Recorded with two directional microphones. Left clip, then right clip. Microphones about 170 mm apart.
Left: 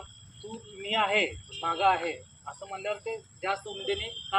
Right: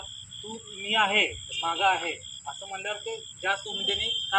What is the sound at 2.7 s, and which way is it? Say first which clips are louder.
Speech: left 1 dB; 20° left (ahead or behind).